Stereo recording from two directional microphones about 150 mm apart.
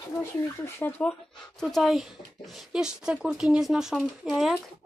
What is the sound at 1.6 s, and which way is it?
Speech, centre (ahead or behind).